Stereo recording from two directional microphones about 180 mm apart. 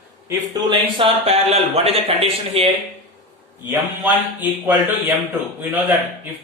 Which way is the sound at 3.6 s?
10° right (ahead or behind).